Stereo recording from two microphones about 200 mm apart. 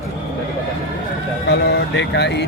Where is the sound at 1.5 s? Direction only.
60° left (ahead or behind).